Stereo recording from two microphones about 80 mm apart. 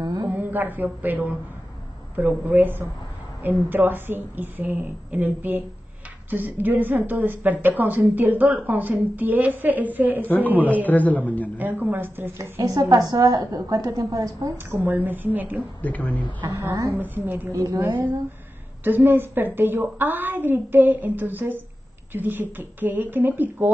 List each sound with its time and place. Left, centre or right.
0.0 s a sound: right
0.3 s a sound: right
1.0 s a woman's voice: right
10.2 s a man's voice: left
10.5 s a woman's voice: right
10.9 s a man's voice: left
11.5 s a woman's voice: right
12.6 s a woman's voice: right
14.7 s a woman's voice: right
15.8 s a man's voice: centre
16.3 s a woman's voice: right
16.9 s a woman's voice: right